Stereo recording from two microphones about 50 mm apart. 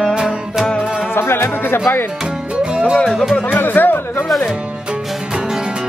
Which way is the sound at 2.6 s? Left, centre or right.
Centre.